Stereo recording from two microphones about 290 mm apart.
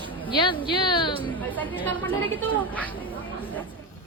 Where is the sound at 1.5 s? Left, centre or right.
Centre.